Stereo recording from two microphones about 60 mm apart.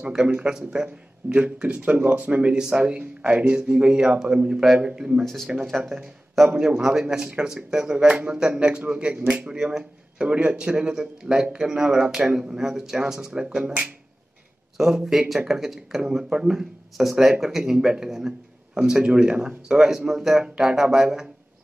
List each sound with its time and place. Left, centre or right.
0.0 s speech: centre
5.2 s speech: centre
6.6 s speech: centre
14.8 s speech: centre